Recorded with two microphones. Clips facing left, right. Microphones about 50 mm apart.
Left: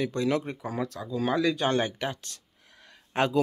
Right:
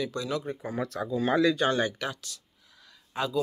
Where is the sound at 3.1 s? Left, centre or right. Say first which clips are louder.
Left 5 dB; left.